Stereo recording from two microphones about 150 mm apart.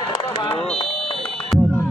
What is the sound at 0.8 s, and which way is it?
Fire alarm, 40° left (ahead or behind).